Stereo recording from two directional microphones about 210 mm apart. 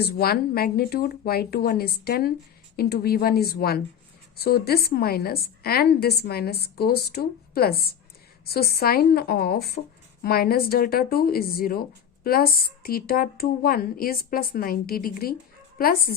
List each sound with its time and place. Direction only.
0.0 s a woman's voice: 45° left (ahead or behind)